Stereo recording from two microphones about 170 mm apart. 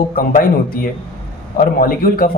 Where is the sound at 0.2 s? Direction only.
55° left (ahead or behind).